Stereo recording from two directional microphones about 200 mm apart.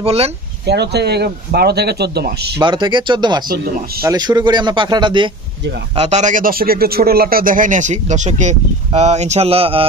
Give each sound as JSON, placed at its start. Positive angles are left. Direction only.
{"t": 0.0, "sound": "speech", "side_deg": -30}
{"t": 0.7, "sound": "speech", "side_deg": -55}
{"t": 2.6, "sound": "speech", "side_deg": -25}
{"t": 3.4, "sound": "speech", "side_deg": -45}
{"t": 4.0, "sound": "speech", "side_deg": -20}
{"t": 5.9, "sound": "a man's voice", "side_deg": -35}